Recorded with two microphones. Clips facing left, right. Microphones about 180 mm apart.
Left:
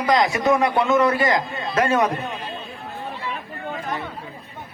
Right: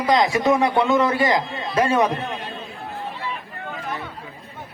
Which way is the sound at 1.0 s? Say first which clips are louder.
Even; 20° right (ahead or behind).